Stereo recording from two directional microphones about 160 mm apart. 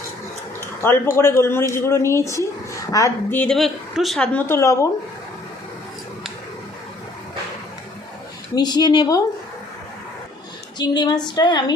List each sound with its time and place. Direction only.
1.1 s speech: 15° left (ahead or behind)
8.5 s female singing: 25° left (ahead or behind)
10.8 s female singing: 25° left (ahead or behind)